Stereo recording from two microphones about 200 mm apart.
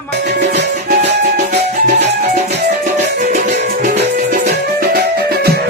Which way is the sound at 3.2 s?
40° right (ahead or behind).